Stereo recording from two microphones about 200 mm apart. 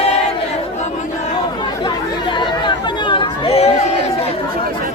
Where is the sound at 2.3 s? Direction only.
25° left (ahead or behind).